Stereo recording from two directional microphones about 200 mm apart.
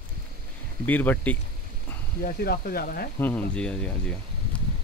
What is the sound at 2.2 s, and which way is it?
Speech, 50° left (ahead or behind).